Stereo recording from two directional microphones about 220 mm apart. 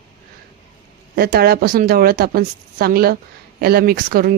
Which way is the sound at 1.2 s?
45° right (ahead or behind).